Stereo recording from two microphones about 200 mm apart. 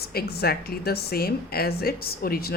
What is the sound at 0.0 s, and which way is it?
A woman's voice, 50° left (ahead or behind).